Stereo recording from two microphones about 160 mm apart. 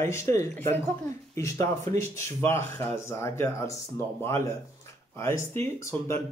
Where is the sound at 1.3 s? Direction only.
20° left (ahead or behind).